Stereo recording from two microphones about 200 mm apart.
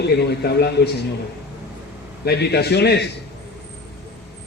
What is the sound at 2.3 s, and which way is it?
Speech, 55° left (ahead or behind).